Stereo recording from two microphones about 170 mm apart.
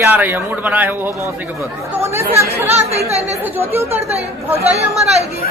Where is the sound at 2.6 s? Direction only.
40° right (ahead or behind).